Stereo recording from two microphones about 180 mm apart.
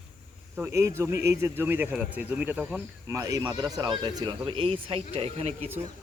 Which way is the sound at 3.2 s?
20° right (ahead or behind).